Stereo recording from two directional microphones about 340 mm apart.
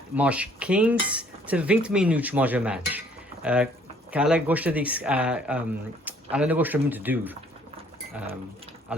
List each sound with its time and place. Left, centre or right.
0.2 s cutlery: centre
8.9 s cutlery: centre